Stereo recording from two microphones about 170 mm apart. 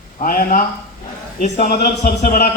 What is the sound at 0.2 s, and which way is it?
Speech, 55° left (ahead or behind).